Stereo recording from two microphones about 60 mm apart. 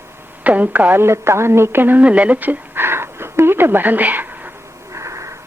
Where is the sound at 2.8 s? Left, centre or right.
Right.